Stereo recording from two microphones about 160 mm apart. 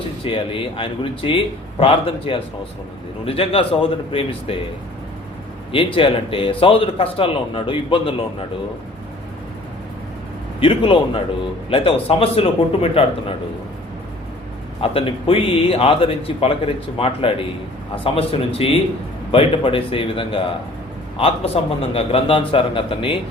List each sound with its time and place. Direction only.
0.3 s speech: 35° left (ahead or behind)
5.7 s speech: 35° left (ahead or behind)
10.6 s speech: 35° left (ahead or behind)
14.8 s speech: 35° left (ahead or behind)